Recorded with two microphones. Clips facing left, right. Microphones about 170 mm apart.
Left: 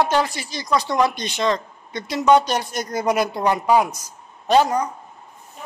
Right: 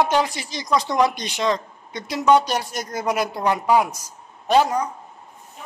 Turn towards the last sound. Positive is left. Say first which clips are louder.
# left 1 dB
turn(degrees=-5)  # may be behind; listen again after turning